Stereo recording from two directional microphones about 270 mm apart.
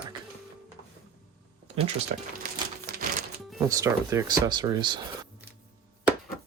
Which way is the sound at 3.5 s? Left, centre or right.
Centre.